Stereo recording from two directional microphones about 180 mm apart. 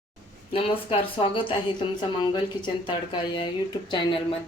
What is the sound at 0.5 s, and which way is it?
Speech, 30° left (ahead or behind).